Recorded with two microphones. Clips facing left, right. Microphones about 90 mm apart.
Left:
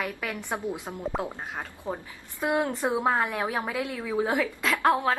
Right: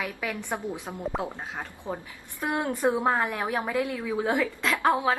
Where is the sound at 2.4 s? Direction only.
20° left (ahead or behind).